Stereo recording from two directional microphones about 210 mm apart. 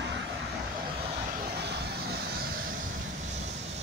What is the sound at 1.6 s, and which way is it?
Vehicle, 50° right (ahead or behind).